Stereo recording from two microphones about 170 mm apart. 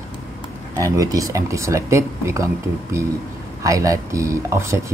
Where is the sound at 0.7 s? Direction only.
20° right (ahead or behind).